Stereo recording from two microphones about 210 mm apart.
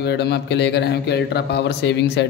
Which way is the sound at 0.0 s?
55° left (ahead or behind).